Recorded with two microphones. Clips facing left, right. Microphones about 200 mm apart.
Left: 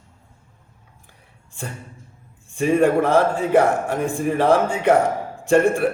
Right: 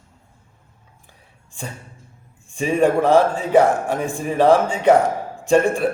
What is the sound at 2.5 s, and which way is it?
A man's voice, 15° right (ahead or behind).